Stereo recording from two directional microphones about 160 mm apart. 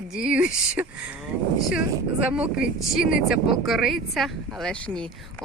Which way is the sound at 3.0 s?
60° left (ahead or behind).